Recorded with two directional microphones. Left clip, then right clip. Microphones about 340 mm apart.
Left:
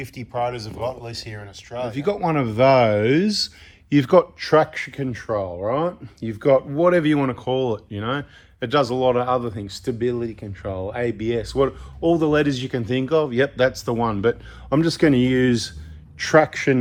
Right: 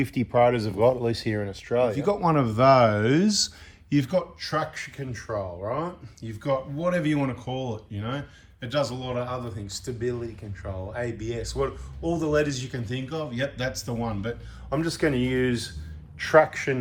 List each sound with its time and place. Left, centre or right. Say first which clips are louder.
0.0 s speech: right 4 dB; centre
1.9 s speech: left 1 dB; centre
14.7 s speech: left 7 dB; centre